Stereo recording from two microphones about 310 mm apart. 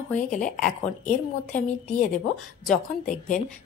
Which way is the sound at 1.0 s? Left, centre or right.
Left.